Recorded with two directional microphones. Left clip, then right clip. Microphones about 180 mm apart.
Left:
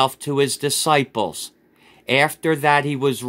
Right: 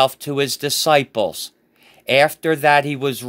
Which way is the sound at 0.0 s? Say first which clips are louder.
Right 1 dB; 25° right (ahead or behind).